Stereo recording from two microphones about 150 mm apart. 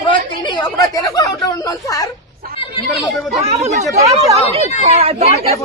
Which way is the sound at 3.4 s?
45° right (ahead or behind).